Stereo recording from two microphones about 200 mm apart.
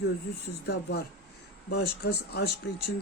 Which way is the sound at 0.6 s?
55° left (ahead or behind).